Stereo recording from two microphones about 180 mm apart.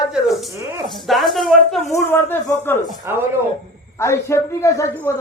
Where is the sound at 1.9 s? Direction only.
10° left (ahead or behind).